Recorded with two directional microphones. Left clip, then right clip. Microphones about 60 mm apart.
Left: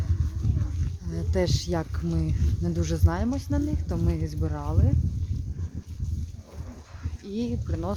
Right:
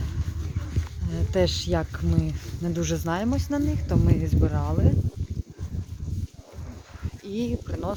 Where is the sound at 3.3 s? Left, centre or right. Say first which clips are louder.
Right 3 dB; centre.